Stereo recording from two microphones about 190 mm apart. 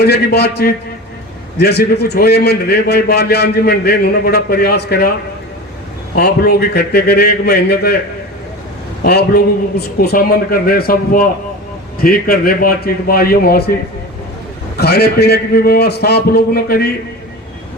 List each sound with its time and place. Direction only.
0.0 s a man's voice: 60° left (ahead or behind)
6.1 s a man's voice: 55° left (ahead or behind)
9.0 s a man's voice: 55° left (ahead or behind)
14.8 s a man's voice: 55° left (ahead or behind)